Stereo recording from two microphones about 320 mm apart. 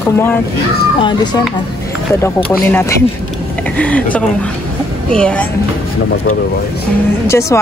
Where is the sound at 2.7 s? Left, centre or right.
Centre.